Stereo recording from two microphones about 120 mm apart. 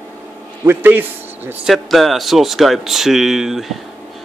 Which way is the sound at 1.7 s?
Centre (ahead or behind).